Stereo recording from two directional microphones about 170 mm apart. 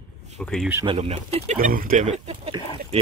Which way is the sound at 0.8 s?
35° right (ahead or behind).